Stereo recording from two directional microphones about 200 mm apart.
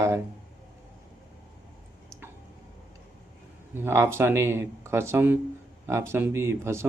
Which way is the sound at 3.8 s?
15° right (ahead or behind).